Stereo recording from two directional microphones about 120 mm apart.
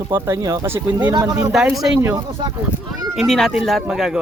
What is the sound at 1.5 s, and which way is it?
Speech, 5° right (ahead or behind).